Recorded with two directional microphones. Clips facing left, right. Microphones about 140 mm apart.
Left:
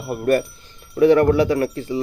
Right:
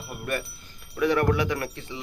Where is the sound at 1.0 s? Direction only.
30° left (ahead or behind).